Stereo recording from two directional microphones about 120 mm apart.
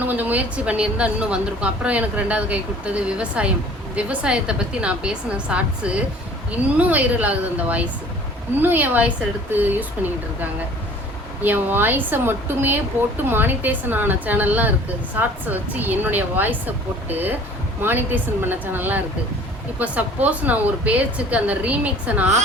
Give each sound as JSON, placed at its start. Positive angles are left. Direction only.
{"t": 0.0, "sound": "speech", "side_deg": -15}
{"t": 11.4, "sound": "speech", "side_deg": -15}